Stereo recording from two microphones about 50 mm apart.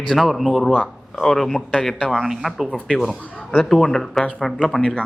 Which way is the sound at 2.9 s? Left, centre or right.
Centre.